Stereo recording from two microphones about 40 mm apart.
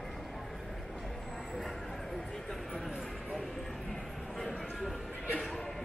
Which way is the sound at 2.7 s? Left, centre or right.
Centre.